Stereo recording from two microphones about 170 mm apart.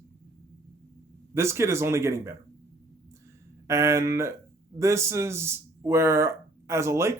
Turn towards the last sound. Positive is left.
turn(degrees=-15)  # may be behind; listen again after turning